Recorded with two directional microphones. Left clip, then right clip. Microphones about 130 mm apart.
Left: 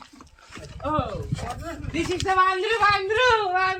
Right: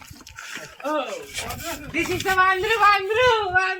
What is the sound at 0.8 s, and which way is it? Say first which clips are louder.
Speech: right 1 dB; 25° left (ahead or behind).